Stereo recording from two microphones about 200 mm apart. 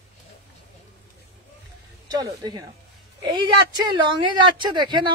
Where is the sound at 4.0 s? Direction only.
25° right (ahead or behind).